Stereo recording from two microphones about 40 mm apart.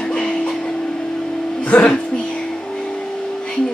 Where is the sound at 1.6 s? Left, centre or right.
Left.